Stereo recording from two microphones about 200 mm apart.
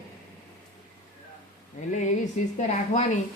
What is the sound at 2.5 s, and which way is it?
Speech, 35° left (ahead or behind).